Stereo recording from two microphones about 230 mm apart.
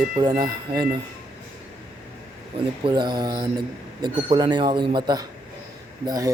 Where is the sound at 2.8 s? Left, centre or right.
Centre.